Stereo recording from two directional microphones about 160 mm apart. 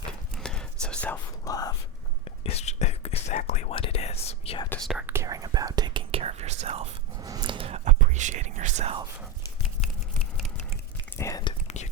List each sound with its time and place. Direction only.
0.3 s whispering: 5° left (ahead or behind)
1.5 s whispering: 25° left (ahead or behind)
2.2 s whispering: 40° left (ahead or behind)
4.9 s whispering: 5° right (ahead or behind)
5.1 s whispering: 20° right (ahead or behind); by 6.8 s 40° right (ahead or behind)
7.2 s a sound: 25° right (ahead or behind)
7.9 s whispering: 50° right (ahead or behind)
11.2 s whispering: 20° left (ahead or behind)